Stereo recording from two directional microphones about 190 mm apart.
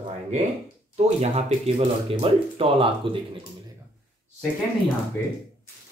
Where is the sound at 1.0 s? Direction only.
35° right (ahead or behind).